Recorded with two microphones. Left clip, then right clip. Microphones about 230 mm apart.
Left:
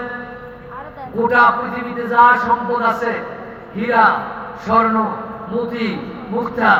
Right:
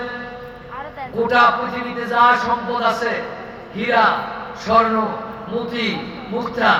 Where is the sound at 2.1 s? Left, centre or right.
Right.